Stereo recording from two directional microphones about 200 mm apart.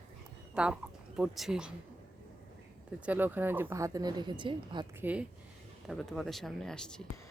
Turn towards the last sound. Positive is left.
turn(degrees=5)  # may be behind; listen again after turning